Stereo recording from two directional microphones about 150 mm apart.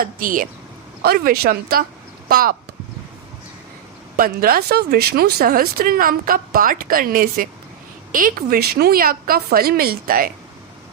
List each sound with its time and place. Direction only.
0.0 s speech: 65° right (ahead or behind)
1.0 s speech: 90° right
2.3 s speech: 75° right (ahead or behind)
4.2 s a woman's voice: 75° right (ahead or behind)